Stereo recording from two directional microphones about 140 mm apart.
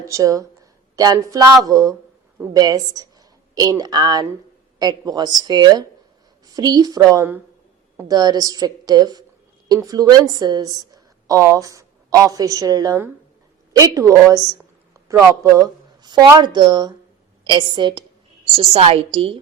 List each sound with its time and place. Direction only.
0.1 s a woman's voice: 25° right (ahead or behind); by 19.4 s 45° right (ahead or behind)